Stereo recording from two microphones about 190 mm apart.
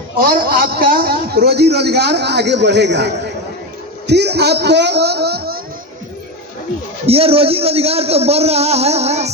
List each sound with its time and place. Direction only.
0.2 s a man's voice: 50° right (ahead or behind)
7.0 s a man's voice: 30° right (ahead or behind)